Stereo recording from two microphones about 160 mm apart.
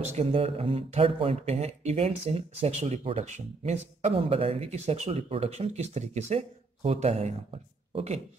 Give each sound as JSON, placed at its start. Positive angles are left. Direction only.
{"t": 0.1, "sound": "speech", "side_deg": -35}